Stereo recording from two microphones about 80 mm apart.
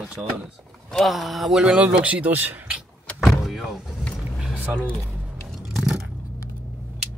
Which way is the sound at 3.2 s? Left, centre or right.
Centre.